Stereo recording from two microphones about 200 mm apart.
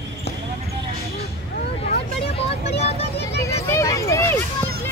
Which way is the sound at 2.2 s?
30° left (ahead or behind).